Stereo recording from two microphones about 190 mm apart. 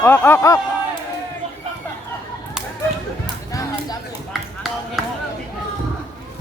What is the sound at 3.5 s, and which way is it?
Music, 15° left (ahead or behind).